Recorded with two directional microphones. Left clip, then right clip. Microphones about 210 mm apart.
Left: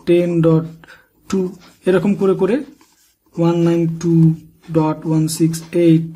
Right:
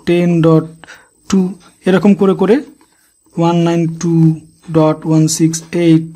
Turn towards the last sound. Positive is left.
turn(degrees=-35)  # may be behind; listen again after turning